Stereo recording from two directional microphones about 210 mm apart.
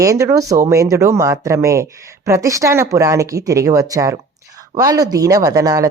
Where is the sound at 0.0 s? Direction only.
15° right (ahead or behind).